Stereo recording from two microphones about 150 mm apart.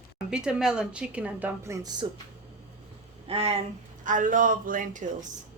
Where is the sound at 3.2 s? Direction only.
40° right (ahead or behind).